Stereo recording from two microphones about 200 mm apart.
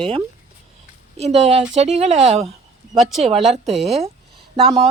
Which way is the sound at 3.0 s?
Centre (ahead or behind).